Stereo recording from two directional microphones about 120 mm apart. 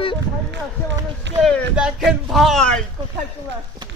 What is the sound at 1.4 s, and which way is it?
Speech, 5° left (ahead or behind).